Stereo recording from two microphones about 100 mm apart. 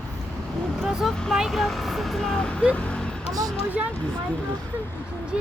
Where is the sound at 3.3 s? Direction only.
35° right (ahead or behind).